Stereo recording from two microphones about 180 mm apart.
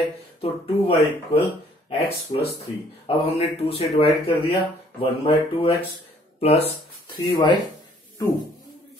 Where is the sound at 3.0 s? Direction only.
35° left (ahead or behind).